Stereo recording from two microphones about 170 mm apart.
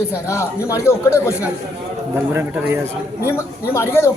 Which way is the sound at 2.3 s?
10° right (ahead or behind).